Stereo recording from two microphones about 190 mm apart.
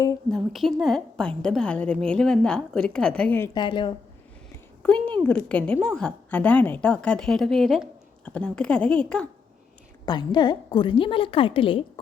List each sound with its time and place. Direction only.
0.3 s a woman's voice: centre (ahead or behind)
3.5 s a woman's voice: 25° left (ahead or behind)
4.8 s a woman's voice: 5° left (ahead or behind)
10.1 s a woman's voice: 25° left (ahead or behind)